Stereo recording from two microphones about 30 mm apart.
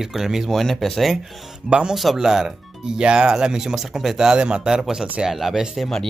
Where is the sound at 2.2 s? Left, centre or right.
Centre.